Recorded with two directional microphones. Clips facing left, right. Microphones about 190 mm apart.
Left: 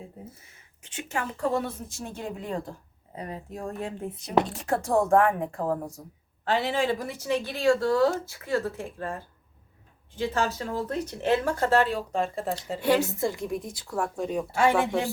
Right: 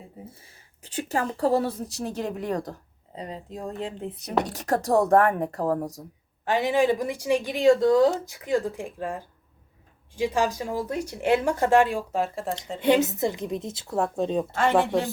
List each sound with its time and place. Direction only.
0.9 s a woman's voice: 35° right (ahead or behind)
2.5 s speech: 75° right (ahead or behind)
3.2 s a woman's voice: 20° right (ahead or behind)
4.6 s a woman's voice: 40° right (ahead or behind)
6.4 s a woman's voice: 15° right (ahead or behind); by 12.5 s centre (ahead or behind)
12.8 s a woman's voice: 20° right (ahead or behind)
14.8 s speech: 15° left (ahead or behind)